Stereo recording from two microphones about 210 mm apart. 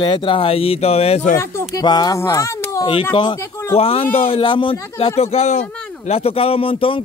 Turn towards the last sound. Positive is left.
turn(degrees=25)  # may be behind; listen again after turning